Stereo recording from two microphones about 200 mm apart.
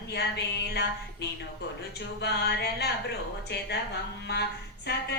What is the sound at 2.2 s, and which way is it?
Speech, 55° left (ahead or behind).